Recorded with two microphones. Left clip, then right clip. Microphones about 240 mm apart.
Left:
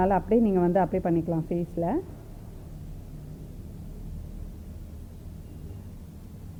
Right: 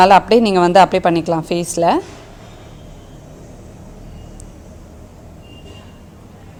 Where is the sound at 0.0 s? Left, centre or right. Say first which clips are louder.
Right 14 dB; right.